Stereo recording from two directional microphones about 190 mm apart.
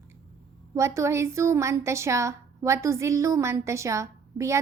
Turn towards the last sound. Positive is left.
turn(degrees=-15)  # may be behind; listen again after turning